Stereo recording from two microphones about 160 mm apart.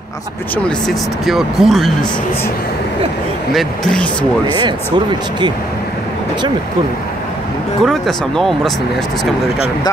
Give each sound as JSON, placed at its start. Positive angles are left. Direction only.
{"t": 0.7, "sound": "speech", "side_deg": 0}
{"t": 3.5, "sound": "speech", "side_deg": 5}
{"t": 4.6, "sound": "speech", "side_deg": -30}
{"t": 7.8, "sound": "speech", "side_deg": 0}